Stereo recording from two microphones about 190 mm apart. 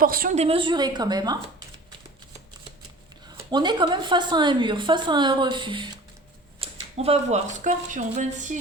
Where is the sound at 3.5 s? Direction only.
25° right (ahead or behind); by 8.6 s 40° right (ahead or behind).